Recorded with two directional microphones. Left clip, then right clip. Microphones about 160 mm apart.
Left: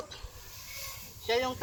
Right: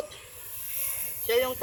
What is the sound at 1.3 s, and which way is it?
Speech, 20° left (ahead or behind).